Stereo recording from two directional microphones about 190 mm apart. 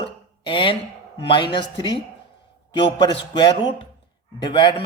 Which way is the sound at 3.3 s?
25° left (ahead or behind).